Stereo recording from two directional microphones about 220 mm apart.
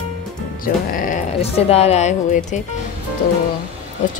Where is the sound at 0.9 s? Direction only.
40° left (ahead or behind).